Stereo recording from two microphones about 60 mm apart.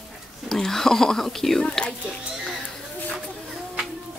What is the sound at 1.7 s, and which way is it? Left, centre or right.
Speech, centre.